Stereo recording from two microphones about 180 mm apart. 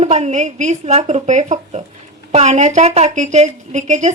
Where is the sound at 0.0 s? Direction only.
35° right (ahead or behind).